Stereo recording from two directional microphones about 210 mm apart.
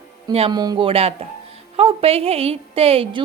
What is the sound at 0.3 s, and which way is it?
A woman's voice, 25° right (ahead or behind).